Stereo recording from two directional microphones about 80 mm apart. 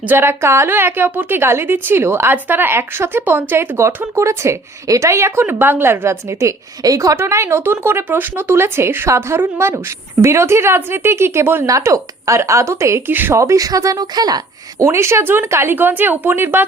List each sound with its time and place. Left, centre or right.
0.1 s a woman's voice: right
6.8 s speech: right
11.6 s speech: right
14.8 s a woman's voice: right